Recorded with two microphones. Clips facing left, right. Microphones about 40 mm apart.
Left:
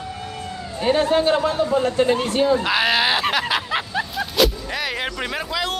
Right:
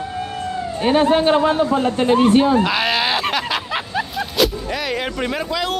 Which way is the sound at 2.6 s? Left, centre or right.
Centre.